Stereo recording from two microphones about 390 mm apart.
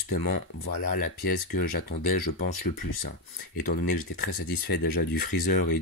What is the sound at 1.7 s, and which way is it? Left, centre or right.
Speech, left.